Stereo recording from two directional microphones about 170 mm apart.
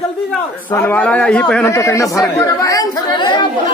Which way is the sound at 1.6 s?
20° left (ahead or behind).